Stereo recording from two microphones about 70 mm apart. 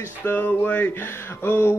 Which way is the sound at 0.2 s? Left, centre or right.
Left.